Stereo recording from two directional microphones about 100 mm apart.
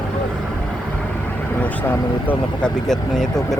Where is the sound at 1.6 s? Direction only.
15° left (ahead or behind).